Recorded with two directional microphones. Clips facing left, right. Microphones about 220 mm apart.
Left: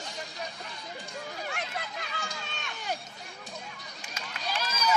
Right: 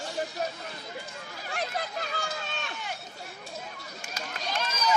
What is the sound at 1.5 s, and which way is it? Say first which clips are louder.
Chatter: right 4 dB; 35° right (ahead or behind).